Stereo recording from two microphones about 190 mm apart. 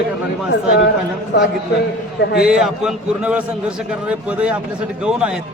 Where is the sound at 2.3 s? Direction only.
5° right (ahead or behind).